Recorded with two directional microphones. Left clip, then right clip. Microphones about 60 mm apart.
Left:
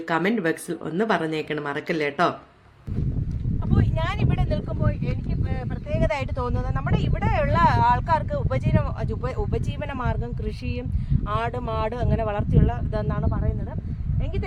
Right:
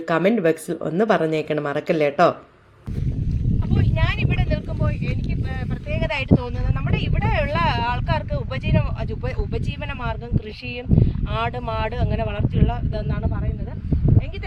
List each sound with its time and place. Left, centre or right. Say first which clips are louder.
0.1 s speech: right 5 dB; right
3.7 s a sound: right 1 dB; left
4.9 s speech: right 2 dB; left
11.3 s speech: left 1 dB; left